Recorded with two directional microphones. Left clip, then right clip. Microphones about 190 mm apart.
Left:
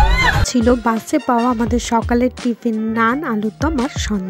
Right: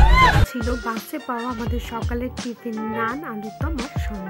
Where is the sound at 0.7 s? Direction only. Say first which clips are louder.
Left 11 dB; 35° left (ahead or behind).